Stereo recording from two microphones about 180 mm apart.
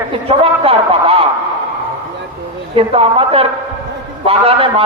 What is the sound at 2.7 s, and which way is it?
A man's voice, 30° right (ahead or behind).